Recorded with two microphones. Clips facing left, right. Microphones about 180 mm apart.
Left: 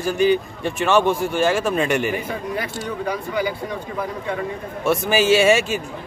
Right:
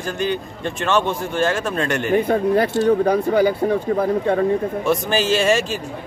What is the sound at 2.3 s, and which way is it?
Speech, 55° right (ahead or behind).